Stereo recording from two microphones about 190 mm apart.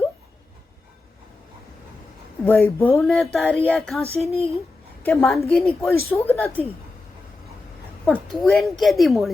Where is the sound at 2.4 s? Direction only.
10° left (ahead or behind).